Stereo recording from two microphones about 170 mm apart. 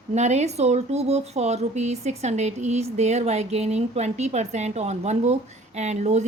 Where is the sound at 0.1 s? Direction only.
40° right (ahead or behind).